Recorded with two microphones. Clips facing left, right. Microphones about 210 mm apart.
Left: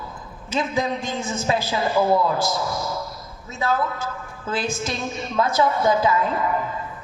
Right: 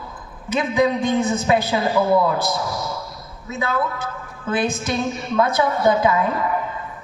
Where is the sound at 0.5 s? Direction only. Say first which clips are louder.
Right 5 dB; 60° right (ahead or behind).